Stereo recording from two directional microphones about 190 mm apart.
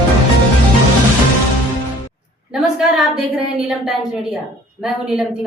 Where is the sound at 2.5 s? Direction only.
Centre (ahead or behind).